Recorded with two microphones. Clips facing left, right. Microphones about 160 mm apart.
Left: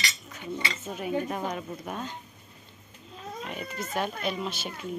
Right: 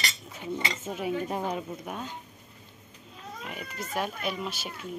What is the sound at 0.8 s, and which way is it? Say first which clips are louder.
Speech: left 1 dB; 20° right (ahead or behind).